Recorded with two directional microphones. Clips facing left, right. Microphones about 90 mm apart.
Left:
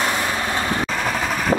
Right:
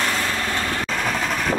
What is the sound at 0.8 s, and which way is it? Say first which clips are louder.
Vehicle: left 1 dB; 5° left (ahead or behind).